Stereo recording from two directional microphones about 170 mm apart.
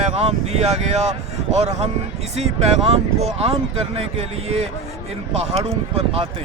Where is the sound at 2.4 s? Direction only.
40° right (ahead or behind).